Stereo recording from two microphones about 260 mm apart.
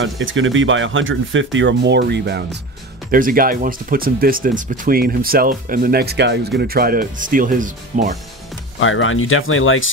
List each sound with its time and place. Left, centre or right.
0.0 s speech: right
8.7 s speech: left